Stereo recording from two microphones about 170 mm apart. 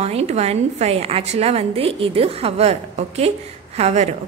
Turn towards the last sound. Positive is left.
turn(degrees=-40)  # may be behind; listen again after turning